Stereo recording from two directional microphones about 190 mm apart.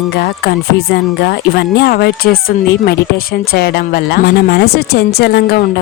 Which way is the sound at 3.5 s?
60° left (ahead or behind).